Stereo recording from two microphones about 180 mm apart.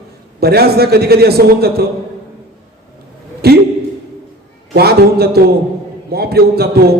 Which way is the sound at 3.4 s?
60° right (ahead or behind).